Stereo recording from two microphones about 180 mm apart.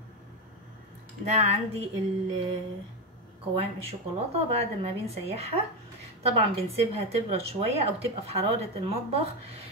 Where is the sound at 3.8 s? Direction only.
35° right (ahead or behind).